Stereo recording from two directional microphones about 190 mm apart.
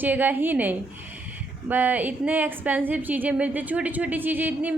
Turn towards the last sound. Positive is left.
turn(degrees=-10)  # may be behind; listen again after turning